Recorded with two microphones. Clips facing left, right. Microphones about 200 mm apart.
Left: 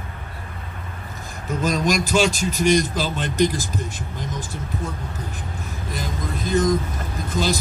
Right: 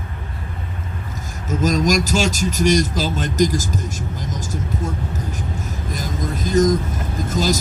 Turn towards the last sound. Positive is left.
turn(degrees=-45)  # may be behind; listen again after turning